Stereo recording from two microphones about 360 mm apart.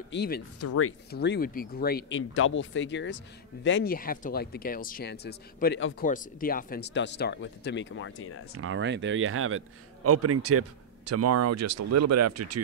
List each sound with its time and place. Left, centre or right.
0.1 s speech: left
0.6 s speech: left
8.5 s a man's voice: right